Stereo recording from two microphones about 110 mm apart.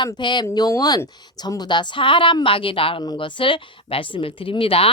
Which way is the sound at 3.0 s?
45° left (ahead or behind).